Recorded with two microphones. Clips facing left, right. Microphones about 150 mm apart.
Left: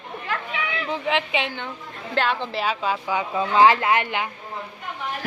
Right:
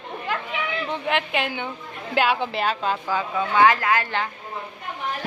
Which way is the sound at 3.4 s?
30° left (ahead or behind).